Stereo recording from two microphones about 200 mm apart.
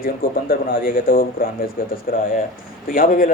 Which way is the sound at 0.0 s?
45° left (ahead or behind).